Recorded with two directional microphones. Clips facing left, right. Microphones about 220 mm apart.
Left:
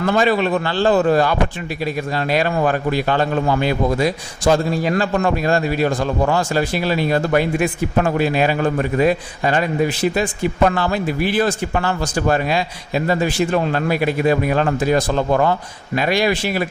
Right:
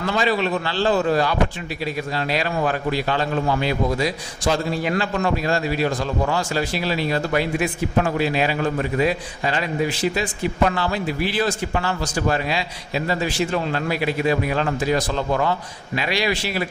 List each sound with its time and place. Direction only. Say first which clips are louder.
0.0 s a man's voice: left 5 dB; 50° left (ahead or behind)
5.1 s a man's voice: left 4 dB; 50° left (ahead or behind)